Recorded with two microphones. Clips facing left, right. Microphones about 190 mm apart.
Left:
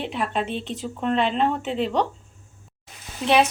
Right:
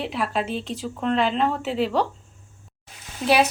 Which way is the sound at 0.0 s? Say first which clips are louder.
Even; centre (ahead or behind).